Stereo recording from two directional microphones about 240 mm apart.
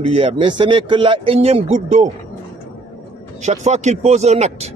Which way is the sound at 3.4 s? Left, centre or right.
Right.